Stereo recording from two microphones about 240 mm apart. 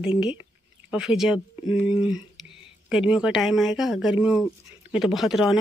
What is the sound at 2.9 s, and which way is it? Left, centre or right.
Speech, centre.